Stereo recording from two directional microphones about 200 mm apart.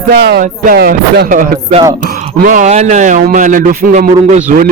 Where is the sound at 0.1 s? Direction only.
55° right (ahead or behind).